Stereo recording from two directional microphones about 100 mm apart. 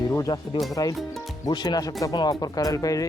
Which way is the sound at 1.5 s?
45° left (ahead or behind).